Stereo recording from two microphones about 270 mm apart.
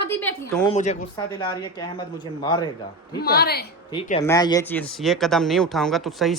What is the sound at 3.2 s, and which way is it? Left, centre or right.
Speech, left.